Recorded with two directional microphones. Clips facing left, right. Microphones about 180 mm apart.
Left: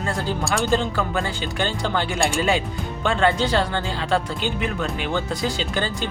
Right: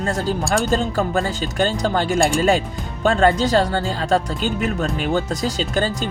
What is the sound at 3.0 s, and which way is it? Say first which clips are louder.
Speech: right 4 dB; 40° right (ahead or behind).